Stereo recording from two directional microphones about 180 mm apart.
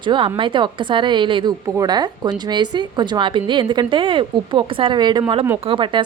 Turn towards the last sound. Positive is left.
turn(degrees=-25)  # may be behind; listen again after turning